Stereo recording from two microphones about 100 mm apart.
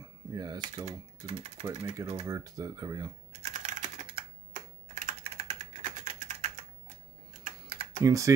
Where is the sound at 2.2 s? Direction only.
30° right (ahead or behind).